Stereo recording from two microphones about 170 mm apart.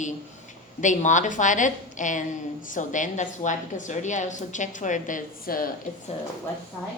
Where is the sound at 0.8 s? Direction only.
45° left (ahead or behind).